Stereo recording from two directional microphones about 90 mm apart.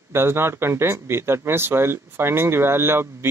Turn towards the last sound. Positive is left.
turn(degrees=-25)  # may be behind; listen again after turning